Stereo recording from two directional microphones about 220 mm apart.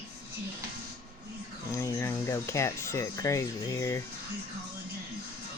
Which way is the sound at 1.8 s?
10° left (ahead or behind).